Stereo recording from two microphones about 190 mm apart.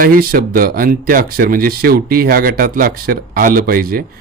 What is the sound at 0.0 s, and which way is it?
A man's voice, 50° right (ahead or behind).